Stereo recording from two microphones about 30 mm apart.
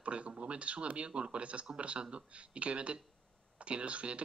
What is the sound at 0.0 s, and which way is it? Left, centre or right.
Speech, right.